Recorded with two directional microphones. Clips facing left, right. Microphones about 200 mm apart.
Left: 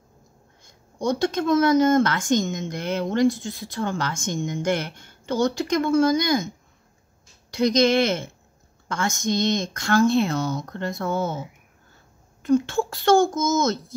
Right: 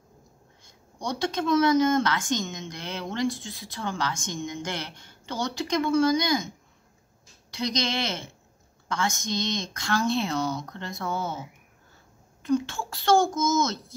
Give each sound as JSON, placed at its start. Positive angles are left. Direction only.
{"t": 0.9, "sound": "speech", "side_deg": 50}
{"t": 7.5, "sound": "speech", "side_deg": 50}
{"t": 12.4, "sound": "speech", "side_deg": 50}